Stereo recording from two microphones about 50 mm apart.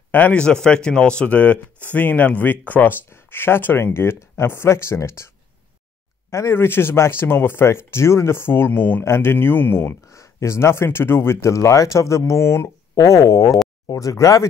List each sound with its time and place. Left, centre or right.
0.3 s speech: centre; by 2.9 s left
3.1 s speech: left
6.5 s speech: left
9.0 s speech: left
10.0 s speech: left
11.5 s speech: left